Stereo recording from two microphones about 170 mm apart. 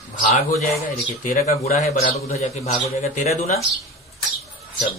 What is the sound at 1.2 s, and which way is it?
Speech, 55° left (ahead or behind).